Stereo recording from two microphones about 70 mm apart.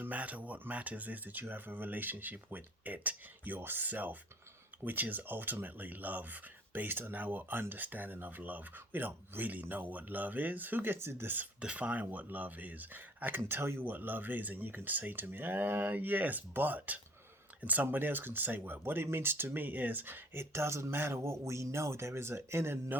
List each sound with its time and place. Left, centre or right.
0.0 s speech: right
11.6 s speech: centre; by 23.0 s right